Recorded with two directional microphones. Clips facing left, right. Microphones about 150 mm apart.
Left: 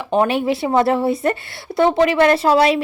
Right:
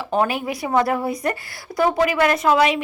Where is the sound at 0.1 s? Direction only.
25° left (ahead or behind).